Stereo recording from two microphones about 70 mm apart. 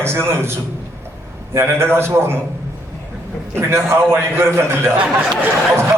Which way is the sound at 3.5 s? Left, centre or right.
Right.